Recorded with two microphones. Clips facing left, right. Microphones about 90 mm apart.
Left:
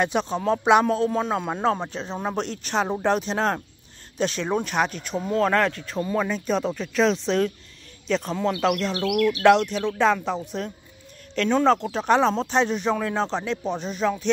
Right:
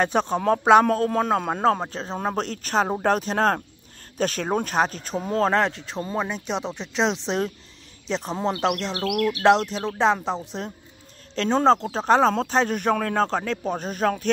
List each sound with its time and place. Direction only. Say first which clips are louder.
0.0 s a man's voice: right 2 dB; 45° right (ahead or behind)
5.5 s speech: even; 25° right (ahead or behind)
8.9 s a man's voice: left 2 dB; 40° right (ahead or behind)